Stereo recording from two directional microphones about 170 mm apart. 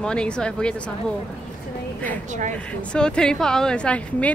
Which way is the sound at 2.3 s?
45° right (ahead or behind).